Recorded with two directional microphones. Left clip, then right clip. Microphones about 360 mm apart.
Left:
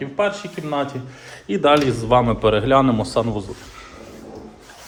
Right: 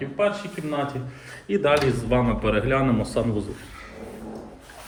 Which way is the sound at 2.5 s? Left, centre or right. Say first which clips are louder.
Left 6 dB; left.